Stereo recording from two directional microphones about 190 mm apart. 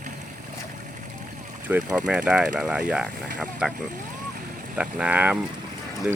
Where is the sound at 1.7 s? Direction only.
5° right (ahead or behind).